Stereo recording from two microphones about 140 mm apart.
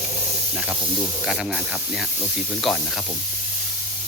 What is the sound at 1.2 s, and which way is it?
Speech, 5° right (ahead or behind).